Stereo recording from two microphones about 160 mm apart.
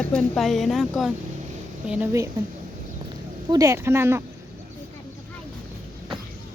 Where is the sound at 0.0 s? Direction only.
5° left (ahead or behind).